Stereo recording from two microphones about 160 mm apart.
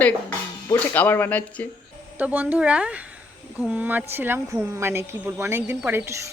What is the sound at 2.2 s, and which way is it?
A woman's voice, 10° right (ahead or behind).